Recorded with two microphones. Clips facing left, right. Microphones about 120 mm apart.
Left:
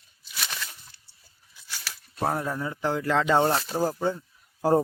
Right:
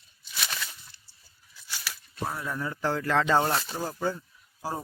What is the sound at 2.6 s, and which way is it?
Speech, 20° left (ahead or behind).